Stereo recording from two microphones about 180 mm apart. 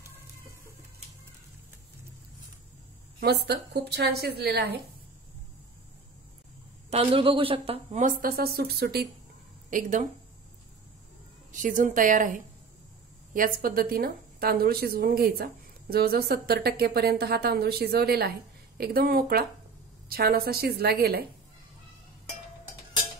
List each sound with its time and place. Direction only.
3.2 s speech: 65° right (ahead or behind)
6.9 s a woman's voice: 30° right (ahead or behind); by 9.0 s 60° right (ahead or behind)
9.7 s speech: 45° right (ahead or behind)
11.5 s a woman's voice: 45° right (ahead or behind)